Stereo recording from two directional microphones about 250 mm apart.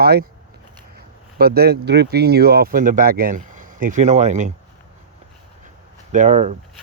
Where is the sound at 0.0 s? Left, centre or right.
Right.